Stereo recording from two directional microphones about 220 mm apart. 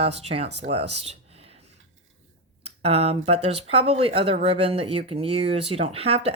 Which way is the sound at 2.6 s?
25° right (ahead or behind).